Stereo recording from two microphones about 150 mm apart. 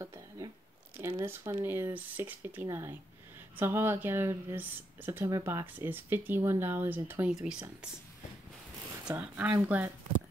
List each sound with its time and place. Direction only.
0.0 s a sound: 20° right (ahead or behind)
0.9 s speech: 15° right (ahead or behind)
9.0 s speech: 10° right (ahead or behind)